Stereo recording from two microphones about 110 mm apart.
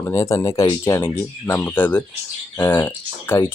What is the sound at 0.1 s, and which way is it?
Speech, 30° left (ahead or behind).